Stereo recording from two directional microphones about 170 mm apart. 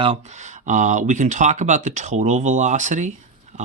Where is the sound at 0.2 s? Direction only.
45° right (ahead or behind).